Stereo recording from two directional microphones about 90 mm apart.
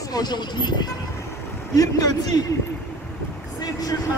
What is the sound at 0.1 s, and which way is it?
A man's voice, 50° left (ahead or behind).